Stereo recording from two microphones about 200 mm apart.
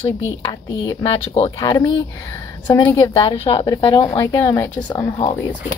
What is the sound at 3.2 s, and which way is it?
Speech, 30° left (ahead or behind).